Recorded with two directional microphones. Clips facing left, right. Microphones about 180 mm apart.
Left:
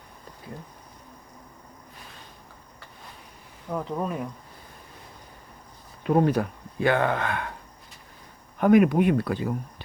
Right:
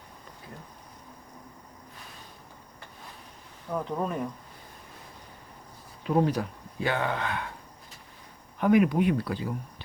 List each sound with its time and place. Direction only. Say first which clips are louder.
3.7 s speech: left 1 dB; centre (ahead or behind)
6.0 s speech: left 4 dB; 55° left (ahead or behind)
8.5 s speech: left 4 dB; 50° left (ahead or behind)